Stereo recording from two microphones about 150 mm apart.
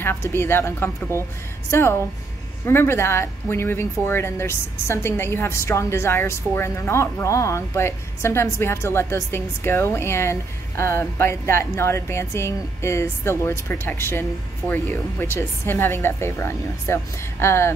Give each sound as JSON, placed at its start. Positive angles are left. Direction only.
{"t": 0.0, "sound": "speech", "side_deg": 15}